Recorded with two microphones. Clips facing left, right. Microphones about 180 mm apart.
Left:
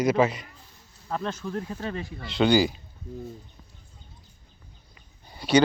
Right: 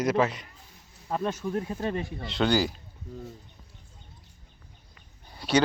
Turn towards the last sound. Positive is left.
turn(degrees=0)  # may be behind; listen again after turning